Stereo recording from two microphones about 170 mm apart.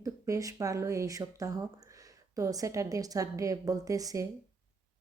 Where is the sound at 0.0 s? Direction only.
20° right (ahead or behind).